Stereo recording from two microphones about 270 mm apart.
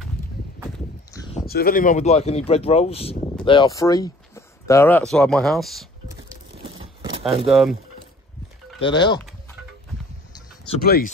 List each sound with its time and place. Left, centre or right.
1.1 s a sound: centre
1.4 s speech: left; by 5.9 s centre
6.6 s a sound: right
7.4 s speech: centre
8.8 s speech: centre
10.8 s speech: left